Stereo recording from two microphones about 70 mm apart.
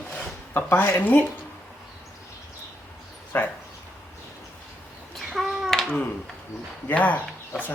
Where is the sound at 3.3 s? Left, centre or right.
Left.